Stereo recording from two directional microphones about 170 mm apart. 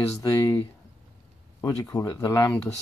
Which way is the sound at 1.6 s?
15° left (ahead or behind).